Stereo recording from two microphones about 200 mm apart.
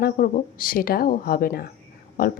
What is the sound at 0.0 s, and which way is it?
A woman's voice, 45° left (ahead or behind).